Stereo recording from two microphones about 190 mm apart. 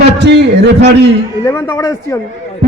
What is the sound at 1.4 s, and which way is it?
Speech, 15° left (ahead or behind).